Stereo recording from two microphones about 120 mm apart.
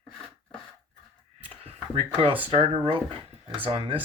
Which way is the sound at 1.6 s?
60° right (ahead or behind).